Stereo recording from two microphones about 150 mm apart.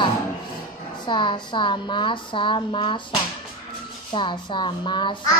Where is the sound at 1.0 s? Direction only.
30° left (ahead or behind).